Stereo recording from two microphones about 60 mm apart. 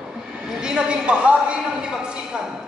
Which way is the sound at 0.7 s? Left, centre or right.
Centre.